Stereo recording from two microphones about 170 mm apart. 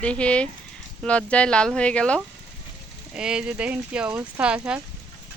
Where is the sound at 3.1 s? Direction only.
5° right (ahead or behind).